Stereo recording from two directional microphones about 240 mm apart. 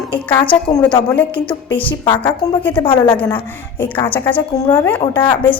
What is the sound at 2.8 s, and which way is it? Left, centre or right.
Speech, centre.